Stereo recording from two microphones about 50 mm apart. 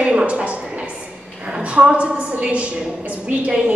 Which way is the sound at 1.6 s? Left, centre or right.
Right.